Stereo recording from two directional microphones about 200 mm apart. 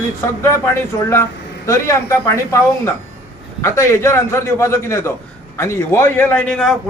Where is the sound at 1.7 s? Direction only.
15° left (ahead or behind).